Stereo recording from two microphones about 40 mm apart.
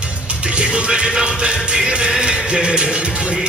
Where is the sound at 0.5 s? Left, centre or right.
Right.